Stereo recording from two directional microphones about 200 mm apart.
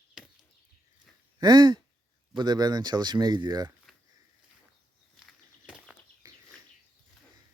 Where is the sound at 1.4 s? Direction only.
20° right (ahead or behind).